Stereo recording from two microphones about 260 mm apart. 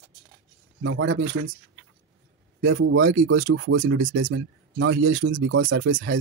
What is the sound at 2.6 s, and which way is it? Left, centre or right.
Speech, right.